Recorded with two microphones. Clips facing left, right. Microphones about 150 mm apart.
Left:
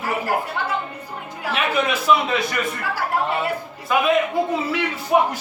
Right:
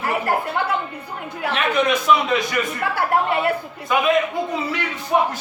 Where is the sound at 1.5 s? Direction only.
5° left (ahead or behind).